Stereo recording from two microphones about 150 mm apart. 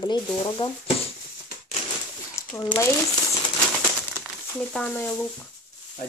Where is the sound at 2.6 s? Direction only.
25° left (ahead or behind).